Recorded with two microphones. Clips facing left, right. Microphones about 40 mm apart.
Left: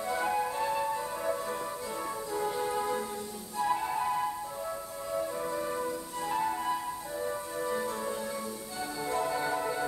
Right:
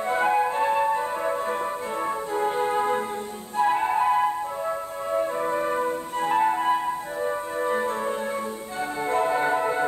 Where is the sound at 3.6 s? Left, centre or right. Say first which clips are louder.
Right 8 dB; right.